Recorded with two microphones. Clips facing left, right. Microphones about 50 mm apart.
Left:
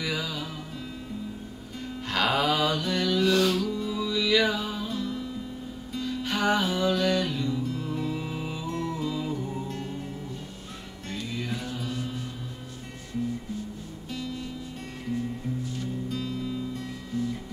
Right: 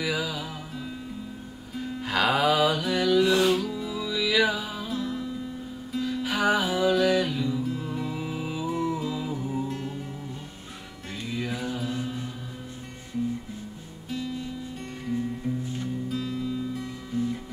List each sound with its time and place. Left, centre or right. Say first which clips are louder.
0.0 s music: right 2 dB; centre
11.2 s music: right 4 dB; centre
16.1 s music: right 2 dB; centre
17.1 s music: right 2 dB; right